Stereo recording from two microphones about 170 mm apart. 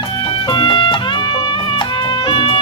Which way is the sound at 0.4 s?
30° left (ahead or behind).